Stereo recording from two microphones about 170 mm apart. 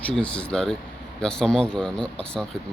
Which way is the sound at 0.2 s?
5° left (ahead or behind).